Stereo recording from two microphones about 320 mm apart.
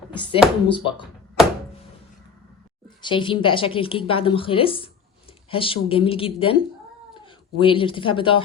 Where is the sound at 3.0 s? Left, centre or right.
Centre.